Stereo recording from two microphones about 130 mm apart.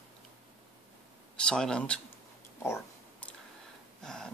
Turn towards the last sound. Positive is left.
turn(degrees=5)  # may be behind; listen again after turning